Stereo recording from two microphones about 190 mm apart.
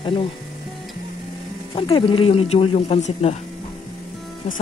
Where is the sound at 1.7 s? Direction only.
25° left (ahead or behind).